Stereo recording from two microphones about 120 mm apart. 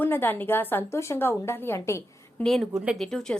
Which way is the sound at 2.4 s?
Centre (ahead or behind).